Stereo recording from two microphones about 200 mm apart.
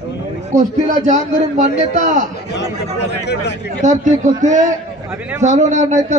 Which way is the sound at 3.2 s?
60° left (ahead or behind).